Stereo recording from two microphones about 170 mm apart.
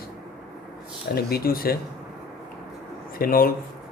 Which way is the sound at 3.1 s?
60° left (ahead or behind).